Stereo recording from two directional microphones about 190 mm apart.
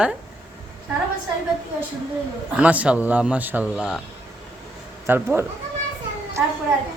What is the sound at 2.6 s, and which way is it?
A man's voice, 5° right (ahead or behind).